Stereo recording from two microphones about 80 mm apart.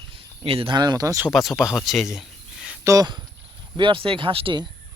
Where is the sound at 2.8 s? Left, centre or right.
Right.